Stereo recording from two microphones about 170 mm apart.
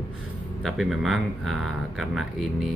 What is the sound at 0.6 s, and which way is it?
Speech, centre (ahead or behind).